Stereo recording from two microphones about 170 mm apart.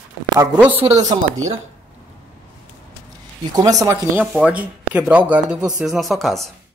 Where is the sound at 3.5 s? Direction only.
20° right (ahead or behind); by 6.5 s centre (ahead or behind).